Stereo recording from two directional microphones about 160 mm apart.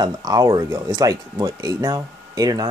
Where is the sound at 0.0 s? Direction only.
25° right (ahead or behind).